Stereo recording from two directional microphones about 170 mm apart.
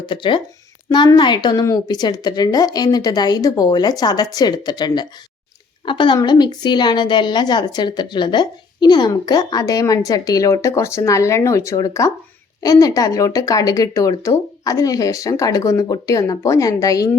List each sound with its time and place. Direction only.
0.0 s a woman's voice: 30° left (ahead or behind)